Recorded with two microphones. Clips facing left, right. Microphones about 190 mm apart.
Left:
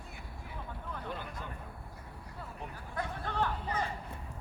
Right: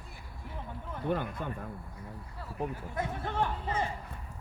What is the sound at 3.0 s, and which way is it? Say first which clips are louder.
Speech: right 2 dB; 20° right (ahead or behind).